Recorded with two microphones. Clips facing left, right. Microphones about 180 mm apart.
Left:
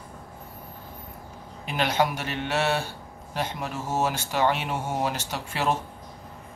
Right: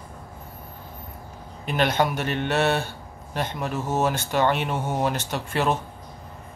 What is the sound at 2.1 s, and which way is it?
Mantra, 55° right (ahead or behind).